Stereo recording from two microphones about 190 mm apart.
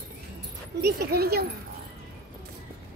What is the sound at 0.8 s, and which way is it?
Speech, 55° right (ahead or behind).